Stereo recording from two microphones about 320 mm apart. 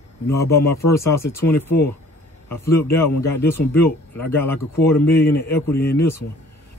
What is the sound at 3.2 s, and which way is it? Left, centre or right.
Speech, left.